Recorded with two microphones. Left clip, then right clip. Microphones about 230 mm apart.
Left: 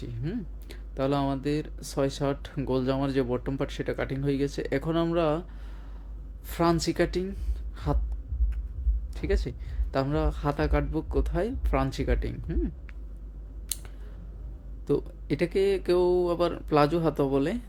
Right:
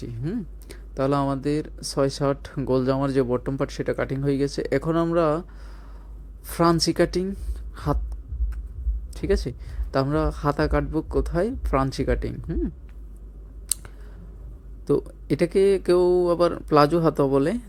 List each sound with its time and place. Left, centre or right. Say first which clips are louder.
0.0 s speech: right 4 dB; centre
6.5 s speech: right 5 dB; centre
9.1 s speech: right 6 dB; right
13.7 s scissors: right 6 dB; centre
14.8 s speech: right 5 dB; centre